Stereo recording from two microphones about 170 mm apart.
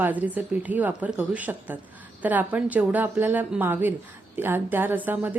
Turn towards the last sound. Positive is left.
turn(degrees=-10)  # may be behind; listen again after turning